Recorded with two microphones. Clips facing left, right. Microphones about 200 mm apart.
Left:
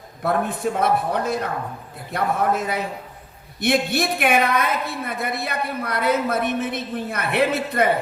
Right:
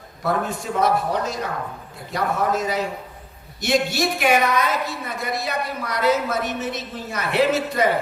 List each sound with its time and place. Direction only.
0.2 s a woman's voice: 60° left (ahead or behind)